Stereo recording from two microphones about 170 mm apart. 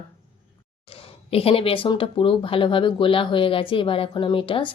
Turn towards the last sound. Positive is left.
turn(degrees=30)  # may be behind; listen again after turning